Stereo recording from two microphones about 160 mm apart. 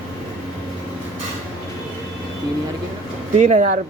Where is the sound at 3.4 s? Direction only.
50° right (ahead or behind).